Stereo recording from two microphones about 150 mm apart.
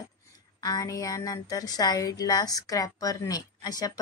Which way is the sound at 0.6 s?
25° left (ahead or behind).